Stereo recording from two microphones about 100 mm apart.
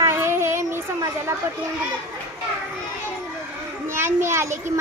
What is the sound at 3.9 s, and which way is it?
Speech, 25° right (ahead or behind).